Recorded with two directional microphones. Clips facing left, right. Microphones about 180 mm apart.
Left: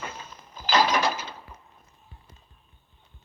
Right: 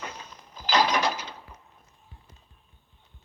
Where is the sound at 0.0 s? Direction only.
50° left (ahead or behind).